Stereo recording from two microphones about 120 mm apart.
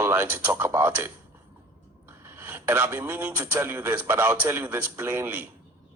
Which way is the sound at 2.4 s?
15° right (ahead or behind).